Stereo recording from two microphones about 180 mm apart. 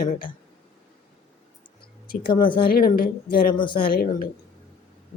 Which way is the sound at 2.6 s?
55° left (ahead or behind).